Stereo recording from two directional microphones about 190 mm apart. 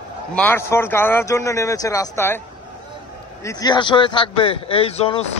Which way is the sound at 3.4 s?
20° left (ahead or behind).